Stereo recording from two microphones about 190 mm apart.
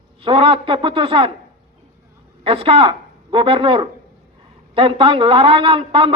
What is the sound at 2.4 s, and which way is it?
A man's voice, 30° right (ahead or behind).